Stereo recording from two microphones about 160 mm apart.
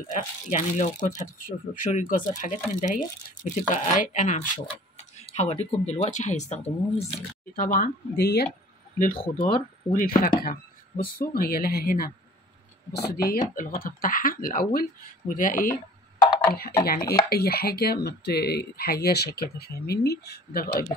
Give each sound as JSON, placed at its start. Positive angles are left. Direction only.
{"t": 0.1, "sound": "speech", "side_deg": 50}
{"t": 7.5, "sound": "speech", "side_deg": 65}
{"t": 9.2, "sound": "speech", "side_deg": 35}
{"t": 9.9, "sound": "speech", "side_deg": 65}
{"t": 12.9, "sound": "speech", "side_deg": 80}
{"t": 16.8, "sound": "speech", "side_deg": 70}